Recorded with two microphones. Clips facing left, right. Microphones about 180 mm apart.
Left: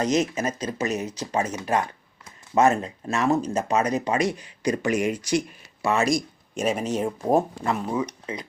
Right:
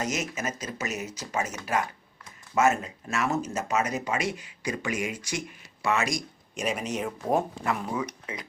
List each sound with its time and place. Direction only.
0.0 s speech: 35° left (ahead or behind)
2.6 s speech: 35° left (ahead or behind)